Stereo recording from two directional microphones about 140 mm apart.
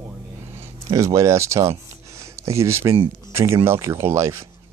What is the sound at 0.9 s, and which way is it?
Speech, 20° right (ahead or behind).